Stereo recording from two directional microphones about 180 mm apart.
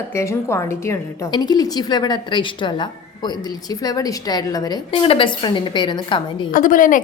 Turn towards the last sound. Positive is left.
turn(degrees=50)  # may be behind; listen again after turning